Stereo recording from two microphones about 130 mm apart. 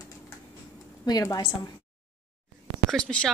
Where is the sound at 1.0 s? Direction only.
30° left (ahead or behind).